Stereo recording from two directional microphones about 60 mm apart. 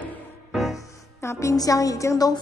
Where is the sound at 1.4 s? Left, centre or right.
Left.